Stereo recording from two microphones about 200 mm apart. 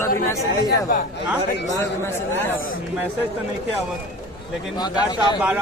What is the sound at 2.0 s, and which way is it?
Speech, 10° left (ahead or behind).